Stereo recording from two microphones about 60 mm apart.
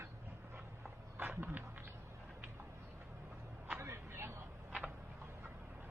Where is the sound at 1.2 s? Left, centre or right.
Right.